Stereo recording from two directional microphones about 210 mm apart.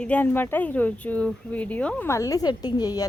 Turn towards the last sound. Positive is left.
turn(degrees=20)  # may be behind; listen again after turning